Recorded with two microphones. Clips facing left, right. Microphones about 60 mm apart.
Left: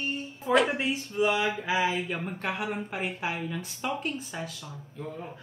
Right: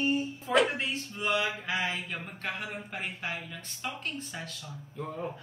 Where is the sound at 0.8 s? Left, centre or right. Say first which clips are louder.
Left 7 dB; centre.